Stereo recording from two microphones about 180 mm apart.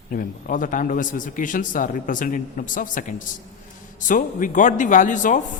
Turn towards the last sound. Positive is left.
turn(degrees=45)  # may be behind; listen again after turning